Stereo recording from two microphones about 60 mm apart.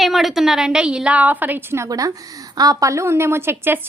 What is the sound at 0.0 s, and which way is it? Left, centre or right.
A woman's voice, centre.